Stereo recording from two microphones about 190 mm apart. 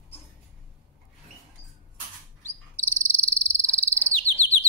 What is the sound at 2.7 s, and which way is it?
Cricket, 10° left (ahead or behind).